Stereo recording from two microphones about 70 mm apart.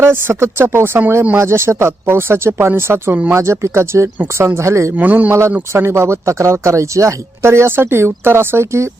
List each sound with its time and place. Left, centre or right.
0.0 s speech: right
4.9 s a man's voice: right
5.3 s speech: right